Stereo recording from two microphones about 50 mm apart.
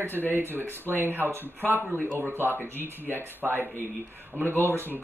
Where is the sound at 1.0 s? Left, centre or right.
Right.